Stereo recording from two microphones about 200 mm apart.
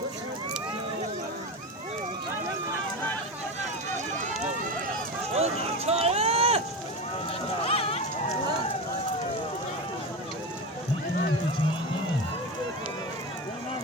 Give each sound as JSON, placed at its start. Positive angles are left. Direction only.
{"t": 5.3, "sound": "run", "side_deg": -30}
{"t": 7.6, "sound": "run", "side_deg": 30}